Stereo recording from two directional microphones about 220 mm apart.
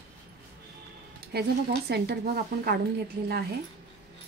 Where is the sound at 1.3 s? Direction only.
50° right (ahead or behind).